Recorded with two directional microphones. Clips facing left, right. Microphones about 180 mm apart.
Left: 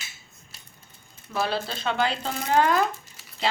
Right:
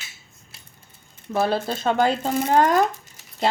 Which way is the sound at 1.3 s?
50° right (ahead or behind).